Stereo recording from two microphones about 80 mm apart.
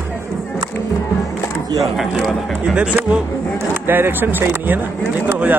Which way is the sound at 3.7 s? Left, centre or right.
Right.